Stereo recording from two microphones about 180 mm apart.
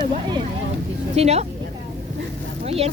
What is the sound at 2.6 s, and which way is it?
Vehicle, 35° right (ahead or behind).